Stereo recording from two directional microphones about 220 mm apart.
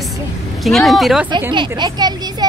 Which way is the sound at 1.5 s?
20° right (ahead or behind).